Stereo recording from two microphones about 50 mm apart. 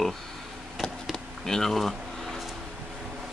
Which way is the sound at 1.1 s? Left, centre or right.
Centre.